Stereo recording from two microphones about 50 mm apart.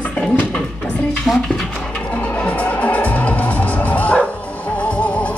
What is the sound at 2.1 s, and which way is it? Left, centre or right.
Music, left.